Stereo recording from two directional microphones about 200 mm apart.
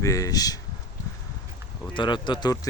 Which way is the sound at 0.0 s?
15° left (ahead or behind).